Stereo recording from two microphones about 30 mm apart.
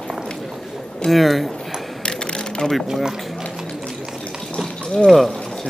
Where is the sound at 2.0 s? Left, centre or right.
Left.